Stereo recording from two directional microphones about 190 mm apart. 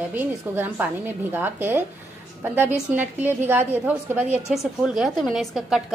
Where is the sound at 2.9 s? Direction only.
10° right (ahead or behind).